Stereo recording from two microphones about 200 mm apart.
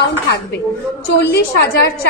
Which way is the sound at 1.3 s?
55° left (ahead or behind).